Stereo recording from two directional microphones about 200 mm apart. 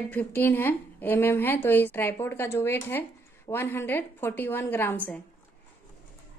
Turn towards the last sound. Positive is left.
turn(degrees=10)  # may be behind; listen again after turning